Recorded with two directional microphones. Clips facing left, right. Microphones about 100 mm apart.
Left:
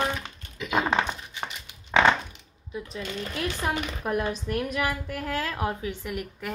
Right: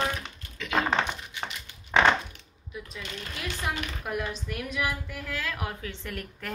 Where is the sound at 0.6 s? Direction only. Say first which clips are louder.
Left 1 dB; 15° left (ahead or behind).